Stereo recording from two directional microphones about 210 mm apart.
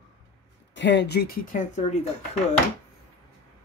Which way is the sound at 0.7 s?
55° left (ahead or behind).